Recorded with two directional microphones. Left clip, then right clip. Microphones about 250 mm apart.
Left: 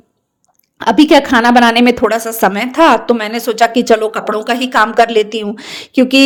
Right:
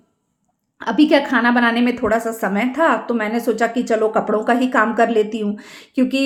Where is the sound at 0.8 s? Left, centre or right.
Left.